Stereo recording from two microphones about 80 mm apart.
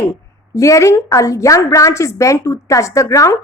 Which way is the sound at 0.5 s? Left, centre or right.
Left.